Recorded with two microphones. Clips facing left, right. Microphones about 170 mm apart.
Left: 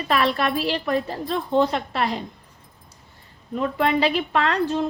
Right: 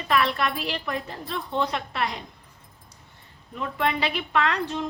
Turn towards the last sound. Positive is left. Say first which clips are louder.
# left 4 dB
turn(degrees=35)  # may be behind; listen again after turning